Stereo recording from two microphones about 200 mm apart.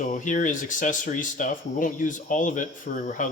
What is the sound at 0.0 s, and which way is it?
Speech, 40° left (ahead or behind).